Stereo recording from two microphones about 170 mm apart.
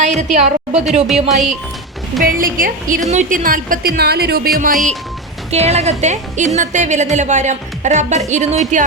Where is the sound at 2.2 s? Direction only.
55° right (ahead or behind).